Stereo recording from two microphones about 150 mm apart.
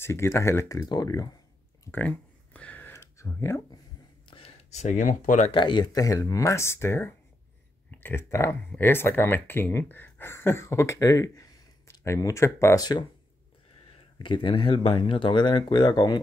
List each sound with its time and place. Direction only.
0.0 s speech: 20° left (ahead or behind)
1.9 s a sound: 10° left (ahead or behind)
4.3 s a sound: 40° left (ahead or behind)
4.8 s speech: 60° left (ahead or behind)
5.5 s speech: 30° left (ahead or behind)
14.1 s speech: 35° left (ahead or behind)